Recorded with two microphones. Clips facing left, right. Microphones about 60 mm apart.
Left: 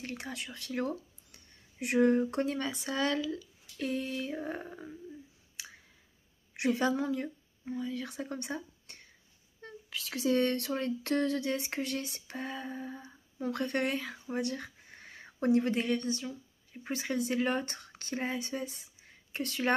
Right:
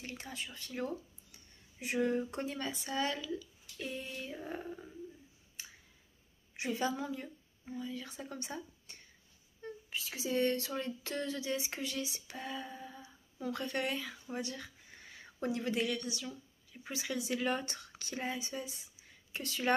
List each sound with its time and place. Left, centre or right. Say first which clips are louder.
0.0 s speech: left 4 dB; left
4.3 s speech: left 4 dB; left
5.6 s clicking: left 4 dB; left
6.5 s a woman's voice: left 6 dB; left
9.6 s speech: even; left
14.4 s a sound: left 7 dB; left
15.4 s a woman's voice: left 6 dB; left